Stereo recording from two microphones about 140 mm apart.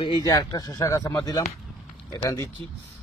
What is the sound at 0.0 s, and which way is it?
Speech, 30° left (ahead or behind).